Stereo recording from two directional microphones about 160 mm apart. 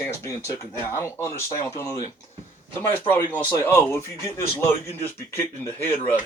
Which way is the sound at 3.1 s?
15° left (ahead or behind).